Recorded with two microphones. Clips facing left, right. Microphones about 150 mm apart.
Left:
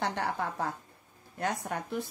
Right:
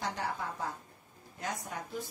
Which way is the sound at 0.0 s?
65° left (ahead or behind).